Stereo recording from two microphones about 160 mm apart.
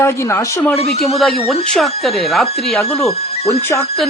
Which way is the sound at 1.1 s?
Centre (ahead or behind).